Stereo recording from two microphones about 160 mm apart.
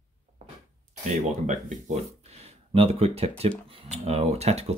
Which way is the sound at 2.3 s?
40° right (ahead or behind).